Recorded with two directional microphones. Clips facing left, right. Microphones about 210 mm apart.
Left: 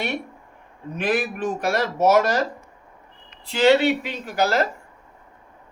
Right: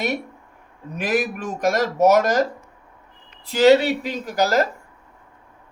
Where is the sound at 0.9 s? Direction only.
40° right (ahead or behind).